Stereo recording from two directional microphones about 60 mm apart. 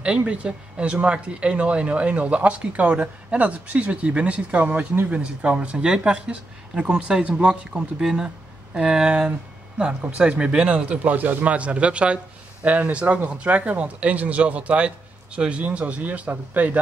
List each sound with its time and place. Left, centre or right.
0.2 s speech: right